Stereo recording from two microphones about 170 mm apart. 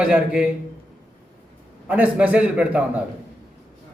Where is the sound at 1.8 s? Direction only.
10° right (ahead or behind).